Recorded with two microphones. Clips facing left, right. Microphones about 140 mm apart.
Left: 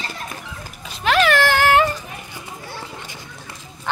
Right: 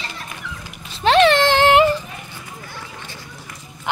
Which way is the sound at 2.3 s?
25° left (ahead or behind).